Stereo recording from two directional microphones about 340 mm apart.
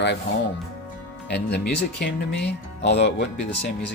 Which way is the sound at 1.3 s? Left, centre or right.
Left.